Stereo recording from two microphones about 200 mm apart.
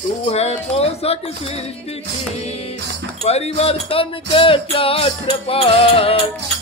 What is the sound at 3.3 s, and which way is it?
Music, 30° left (ahead or behind).